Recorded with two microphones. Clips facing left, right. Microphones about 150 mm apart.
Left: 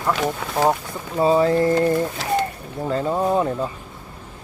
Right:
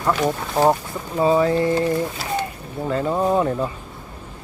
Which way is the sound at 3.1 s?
5° left (ahead or behind).